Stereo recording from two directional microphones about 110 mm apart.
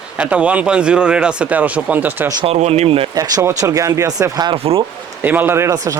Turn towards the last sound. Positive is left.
turn(degrees=-25)  # may be behind; listen again after turning